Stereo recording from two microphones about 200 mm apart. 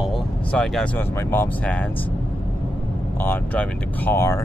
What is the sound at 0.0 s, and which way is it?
Speech, 5° left (ahead or behind).